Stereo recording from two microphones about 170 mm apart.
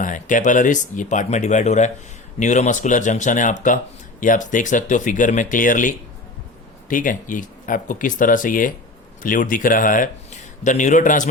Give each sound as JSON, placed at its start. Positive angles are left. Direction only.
{"t": 0.0, "sound": "speech", "side_deg": 50}